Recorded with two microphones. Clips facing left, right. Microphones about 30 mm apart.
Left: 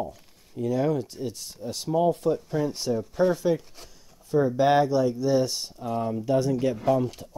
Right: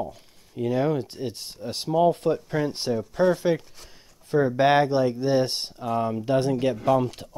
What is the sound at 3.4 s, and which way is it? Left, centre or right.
Speech, right.